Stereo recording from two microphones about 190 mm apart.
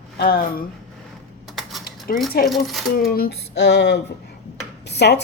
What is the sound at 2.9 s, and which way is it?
A woman's voice, 50° left (ahead or behind).